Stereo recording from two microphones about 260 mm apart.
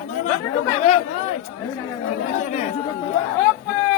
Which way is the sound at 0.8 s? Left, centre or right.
Left.